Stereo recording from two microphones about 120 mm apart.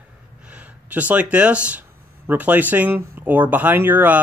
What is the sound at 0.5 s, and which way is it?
Speech, 10° right (ahead or behind).